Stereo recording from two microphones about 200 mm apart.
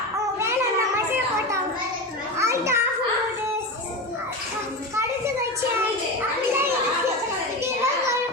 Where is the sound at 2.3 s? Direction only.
15° right (ahead or behind).